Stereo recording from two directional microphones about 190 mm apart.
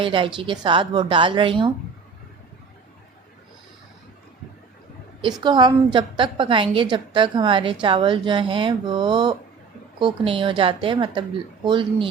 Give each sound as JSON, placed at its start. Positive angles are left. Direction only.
{"t": 0.0, "sound": "a woman's voice", "side_deg": -25}
{"t": 5.4, "sound": "a woman's voice", "side_deg": -25}